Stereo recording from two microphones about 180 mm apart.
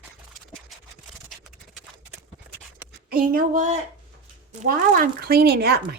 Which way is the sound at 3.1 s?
50° right (ahead or behind).